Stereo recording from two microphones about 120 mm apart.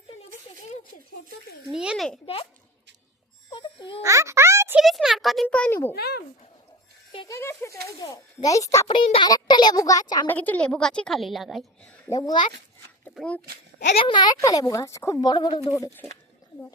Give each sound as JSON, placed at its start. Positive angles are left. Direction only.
{"t": 0.5, "sound": "a sound", "side_deg": 40}
{"t": 1.6, "sound": "a child's voice", "side_deg": -5}
{"t": 2.2, "sound": "a sound", "side_deg": 50}
{"t": 3.5, "sound": "babbling", "side_deg": 40}
{"t": 4.0, "sound": "a sound", "side_deg": -25}
{"t": 4.8, "sound": "a sound", "side_deg": 0}
{"t": 7.3, "sound": "a child's voice", "side_deg": 25}
{"t": 8.9, "sound": "speech", "side_deg": 40}
{"t": 10.2, "sound": "a woman's voice", "side_deg": 15}
{"t": 12.1, "sound": "speech", "side_deg": 35}
{"t": 13.2, "sound": "a woman's voice", "side_deg": -5}
{"t": 13.9, "sound": "speech", "side_deg": 45}
{"t": 15.8, "sound": "speech", "side_deg": 20}